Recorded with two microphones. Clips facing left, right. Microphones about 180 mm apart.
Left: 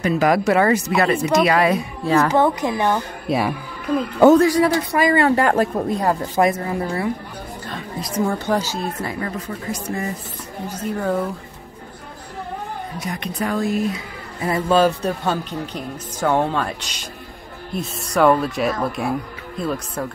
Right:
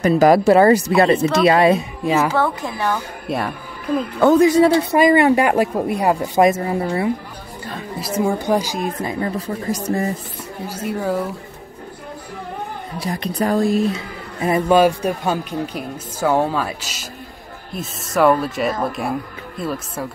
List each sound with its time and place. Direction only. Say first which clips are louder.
0.0 s speech: right 5 dB; 35° right (ahead or behind)
2.3 s speech: left 3 dB; 20° left (ahead or behind)
3.3 s speech: left 3 dB; 5° left (ahead or behind)
4.4 s speech: right 3 dB; 25° right (ahead or behind)
7.6 s a man's voice: right 4 dB; 5° right (ahead or behind)
9.7 s speech: right 5 dB; 35° right (ahead or behind)
10.7 s a man's voice: even; 10° right (ahead or behind)
13.0 s speech: right 5 dB; 35° right (ahead or behind)
14.4 s a man's voice: right 3 dB; 15° right (ahead or behind)